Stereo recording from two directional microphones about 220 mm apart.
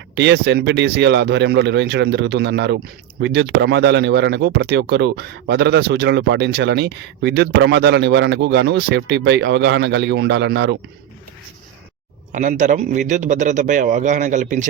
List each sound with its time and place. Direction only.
0.2 s speech: 50° right (ahead or behind)
12.3 s a man's voice: 35° right (ahead or behind)